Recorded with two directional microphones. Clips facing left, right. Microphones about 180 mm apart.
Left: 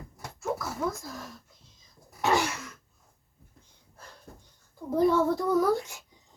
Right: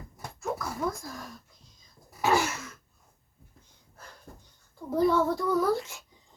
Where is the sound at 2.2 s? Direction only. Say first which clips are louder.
Right 1 dB; centre (ahead or behind).